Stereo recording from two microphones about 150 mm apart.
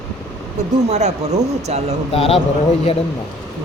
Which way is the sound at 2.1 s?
40° left (ahead or behind).